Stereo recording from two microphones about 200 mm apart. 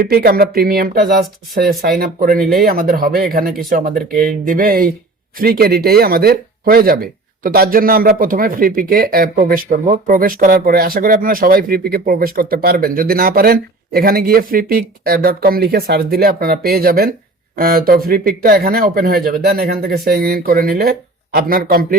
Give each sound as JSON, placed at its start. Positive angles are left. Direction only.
{"t": 0.0, "sound": "speech", "side_deg": -50}
{"t": 3.4, "sound": "speech", "side_deg": 0}
{"t": 3.7, "sound": "speech", "side_deg": -45}